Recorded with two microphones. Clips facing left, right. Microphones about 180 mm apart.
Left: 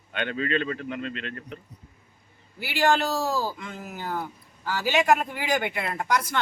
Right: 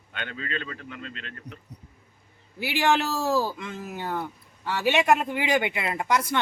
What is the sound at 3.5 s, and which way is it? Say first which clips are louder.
Speech: right 2 dB; 25° right (ahead or behind).